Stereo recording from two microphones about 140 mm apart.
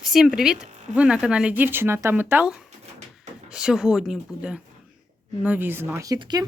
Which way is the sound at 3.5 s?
5° right (ahead or behind).